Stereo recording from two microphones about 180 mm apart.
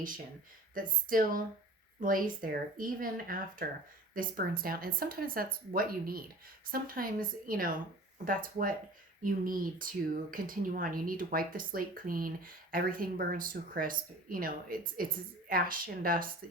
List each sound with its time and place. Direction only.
0.7 s speech: 50° right (ahead or behind)